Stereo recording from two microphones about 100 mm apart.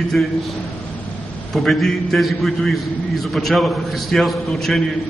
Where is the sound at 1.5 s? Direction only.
Centre (ahead or behind).